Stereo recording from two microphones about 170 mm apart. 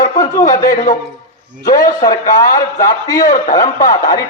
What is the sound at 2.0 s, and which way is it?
A man's voice, 20° left (ahead or behind).